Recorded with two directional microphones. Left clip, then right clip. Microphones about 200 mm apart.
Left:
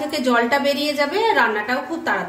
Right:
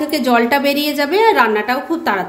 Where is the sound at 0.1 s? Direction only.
35° right (ahead or behind).